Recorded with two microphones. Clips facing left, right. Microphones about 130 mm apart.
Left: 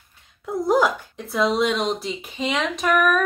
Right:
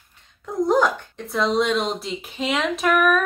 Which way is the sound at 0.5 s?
10° left (ahead or behind).